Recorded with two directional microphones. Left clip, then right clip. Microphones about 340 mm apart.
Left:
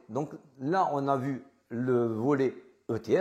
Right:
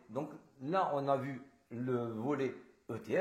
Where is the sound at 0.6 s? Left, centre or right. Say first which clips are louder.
Left 6 dB; left.